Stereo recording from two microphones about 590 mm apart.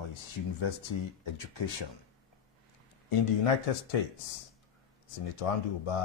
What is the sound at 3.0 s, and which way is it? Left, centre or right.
Speech, left.